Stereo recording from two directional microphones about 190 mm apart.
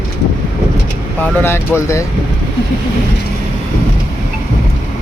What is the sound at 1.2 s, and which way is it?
Speech, 10° left (ahead or behind).